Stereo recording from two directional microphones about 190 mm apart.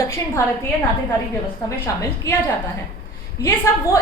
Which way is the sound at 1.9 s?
15° left (ahead or behind).